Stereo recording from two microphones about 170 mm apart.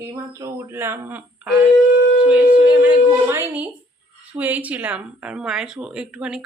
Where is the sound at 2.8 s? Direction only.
15° right (ahead or behind).